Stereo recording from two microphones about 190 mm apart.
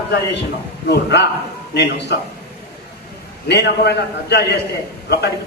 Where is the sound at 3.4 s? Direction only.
60° left (ahead or behind).